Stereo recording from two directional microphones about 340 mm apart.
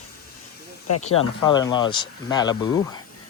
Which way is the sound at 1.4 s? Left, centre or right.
Centre.